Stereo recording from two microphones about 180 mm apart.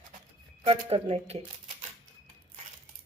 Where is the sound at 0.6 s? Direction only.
35° right (ahead or behind).